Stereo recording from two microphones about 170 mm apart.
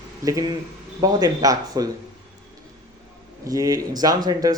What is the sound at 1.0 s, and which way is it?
Speech, 20° right (ahead or behind).